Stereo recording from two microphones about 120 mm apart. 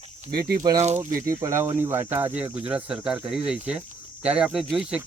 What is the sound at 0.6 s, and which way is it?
Speech, 30° right (ahead or behind).